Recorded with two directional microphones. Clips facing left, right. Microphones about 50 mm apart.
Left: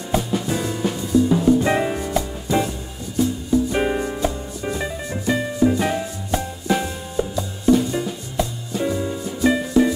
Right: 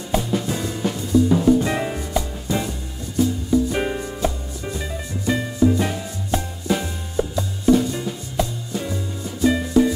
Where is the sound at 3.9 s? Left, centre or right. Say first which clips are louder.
Left 2 dB; centre.